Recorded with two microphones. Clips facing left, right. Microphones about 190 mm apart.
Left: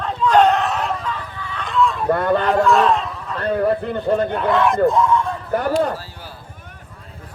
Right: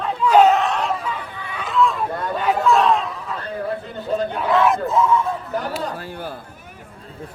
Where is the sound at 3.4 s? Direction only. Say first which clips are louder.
Left 10 dB; 65° left (ahead or behind).